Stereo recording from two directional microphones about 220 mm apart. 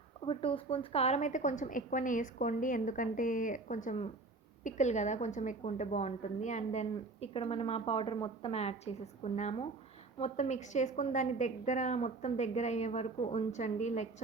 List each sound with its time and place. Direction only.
0.3 s a woman's voice: 25° left (ahead or behind)